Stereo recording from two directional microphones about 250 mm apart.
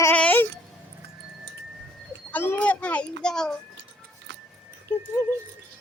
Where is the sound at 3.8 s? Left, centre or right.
Right.